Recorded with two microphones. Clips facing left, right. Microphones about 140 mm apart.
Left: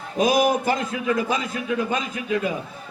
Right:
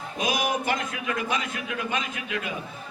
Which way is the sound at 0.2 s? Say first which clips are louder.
Left 8 dB; 35° left (ahead or behind).